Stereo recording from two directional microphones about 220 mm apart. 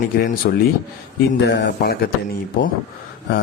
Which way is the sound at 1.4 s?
50° left (ahead or behind).